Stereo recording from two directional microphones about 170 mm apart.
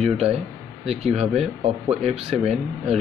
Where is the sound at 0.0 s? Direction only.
35° right (ahead or behind).